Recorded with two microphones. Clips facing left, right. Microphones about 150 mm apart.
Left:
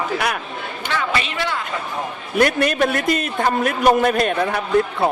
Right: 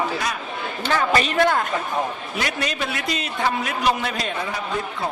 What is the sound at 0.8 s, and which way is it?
Speech, 40° right (ahead or behind).